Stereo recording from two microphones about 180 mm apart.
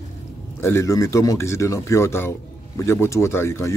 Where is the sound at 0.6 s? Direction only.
15° left (ahead or behind).